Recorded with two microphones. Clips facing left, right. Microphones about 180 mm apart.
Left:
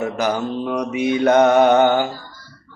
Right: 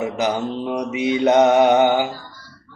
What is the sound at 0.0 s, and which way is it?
Mantra, 20° right (ahead or behind).